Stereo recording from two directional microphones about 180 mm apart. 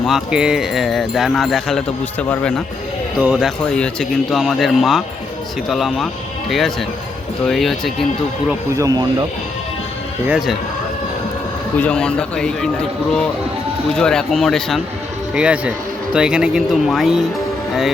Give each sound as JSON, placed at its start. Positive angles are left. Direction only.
{"t": 0.0, "sound": "speech", "side_deg": -5}
{"t": 8.7, "sound": "speech", "side_deg": -20}
{"t": 10.2, "sound": "speech", "side_deg": -5}
{"t": 11.8, "sound": "speech", "side_deg": 5}